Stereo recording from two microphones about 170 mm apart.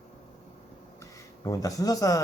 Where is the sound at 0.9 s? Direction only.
20° left (ahead or behind).